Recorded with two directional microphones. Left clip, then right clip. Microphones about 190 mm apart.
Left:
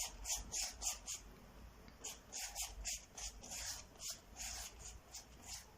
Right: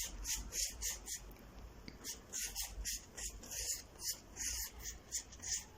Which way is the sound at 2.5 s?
5° left (ahead or behind).